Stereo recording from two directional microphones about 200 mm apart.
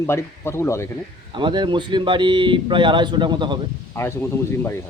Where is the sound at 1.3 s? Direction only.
25° right (ahead or behind).